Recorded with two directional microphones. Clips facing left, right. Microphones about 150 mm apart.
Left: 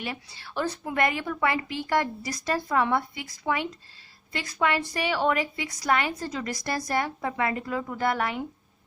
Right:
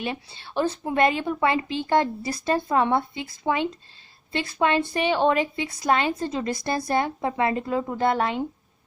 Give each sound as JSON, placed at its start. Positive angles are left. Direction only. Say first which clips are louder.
{"t": 0.0, "sound": "a woman's voice", "louder": "right 5 dB", "side_deg": -25}